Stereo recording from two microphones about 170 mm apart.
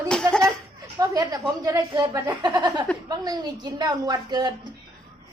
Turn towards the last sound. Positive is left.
turn(degrees=-25)  # may be behind; listen again after turning